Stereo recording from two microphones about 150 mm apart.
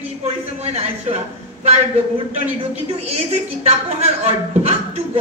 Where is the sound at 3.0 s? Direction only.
45° right (ahead or behind).